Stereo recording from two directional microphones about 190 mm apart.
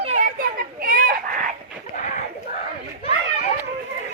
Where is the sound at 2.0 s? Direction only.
40° left (ahead or behind).